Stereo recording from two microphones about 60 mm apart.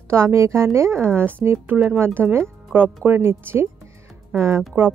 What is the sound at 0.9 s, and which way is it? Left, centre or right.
A woman's voice, right.